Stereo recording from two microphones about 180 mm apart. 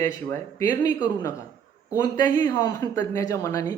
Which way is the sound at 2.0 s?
20° left (ahead or behind).